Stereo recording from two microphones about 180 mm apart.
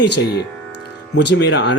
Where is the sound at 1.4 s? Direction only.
75° left (ahead or behind).